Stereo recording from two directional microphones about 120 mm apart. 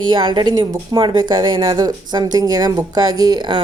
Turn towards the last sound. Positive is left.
turn(degrees=-35)  # may be behind; listen again after turning